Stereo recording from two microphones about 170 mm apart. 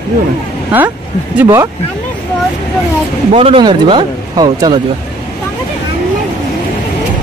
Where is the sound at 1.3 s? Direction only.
15° right (ahead or behind).